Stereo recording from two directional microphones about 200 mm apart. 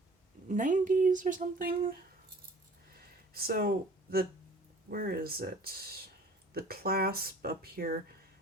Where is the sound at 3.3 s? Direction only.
50° right (ahead or behind).